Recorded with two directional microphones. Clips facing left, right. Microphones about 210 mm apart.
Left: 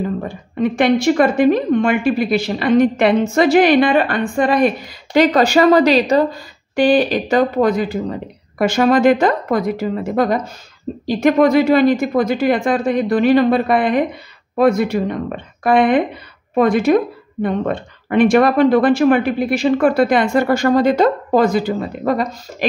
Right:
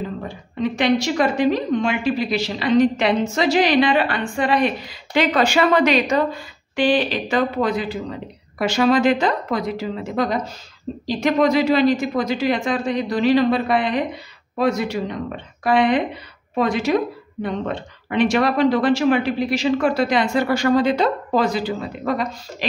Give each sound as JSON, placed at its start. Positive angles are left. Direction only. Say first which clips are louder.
{"t": 0.6, "sound": "a woman's voice", "louder": "left 4 dB", "side_deg": 55}